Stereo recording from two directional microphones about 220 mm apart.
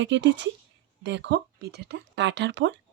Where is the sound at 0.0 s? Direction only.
55° right (ahead or behind).